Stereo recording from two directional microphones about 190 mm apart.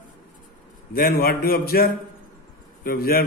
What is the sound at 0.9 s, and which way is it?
A man's voice, 50° left (ahead or behind).